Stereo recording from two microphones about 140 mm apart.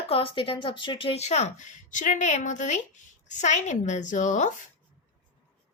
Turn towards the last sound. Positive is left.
turn(degrees=60)  # may be behind; listen again after turning